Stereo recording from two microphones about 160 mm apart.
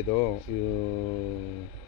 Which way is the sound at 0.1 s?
25° left (ahead or behind).